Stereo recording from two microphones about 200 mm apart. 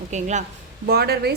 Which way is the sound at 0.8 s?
50° right (ahead or behind).